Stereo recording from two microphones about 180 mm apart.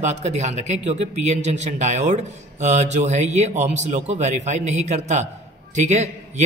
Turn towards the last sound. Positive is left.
turn(degrees=-40)  # may be behind; listen again after turning